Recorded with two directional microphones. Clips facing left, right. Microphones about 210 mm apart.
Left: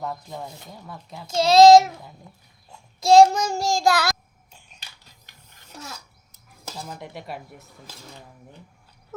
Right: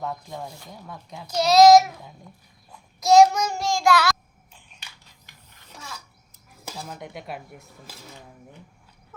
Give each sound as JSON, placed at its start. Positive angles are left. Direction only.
{"t": 0.0, "sound": "dishes", "side_deg": 0}
{"t": 1.3, "sound": "a child's voice", "side_deg": 25}
{"t": 2.6, "sound": "child singing", "side_deg": 25}
{"t": 4.5, "sound": "a sound", "side_deg": 40}
{"t": 6.7, "sound": "dishes", "side_deg": -5}